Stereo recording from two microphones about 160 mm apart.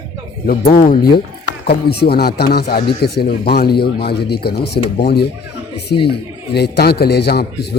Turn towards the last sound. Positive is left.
turn(degrees=90)